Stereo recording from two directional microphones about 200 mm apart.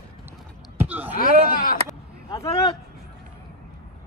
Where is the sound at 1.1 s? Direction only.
45° left (ahead or behind).